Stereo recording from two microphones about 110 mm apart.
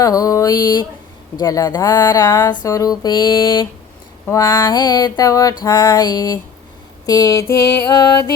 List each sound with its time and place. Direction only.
0.0 s mantra: 30° left (ahead or behind)
4.3 s mantra: 30° left (ahead or behind)
7.0 s a sound: 35° left (ahead or behind)
7.9 s mantra: 35° left (ahead or behind)